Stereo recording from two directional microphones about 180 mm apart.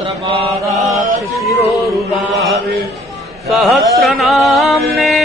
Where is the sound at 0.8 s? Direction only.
45° right (ahead or behind).